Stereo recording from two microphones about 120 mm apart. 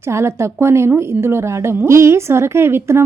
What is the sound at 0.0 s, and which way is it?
A woman's voice, 20° right (ahead or behind).